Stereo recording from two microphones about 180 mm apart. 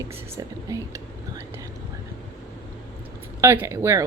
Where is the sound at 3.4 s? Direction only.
15° right (ahead or behind).